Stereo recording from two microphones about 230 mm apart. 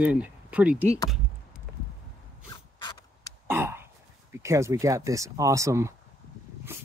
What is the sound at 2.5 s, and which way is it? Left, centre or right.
Mechanisms, centre.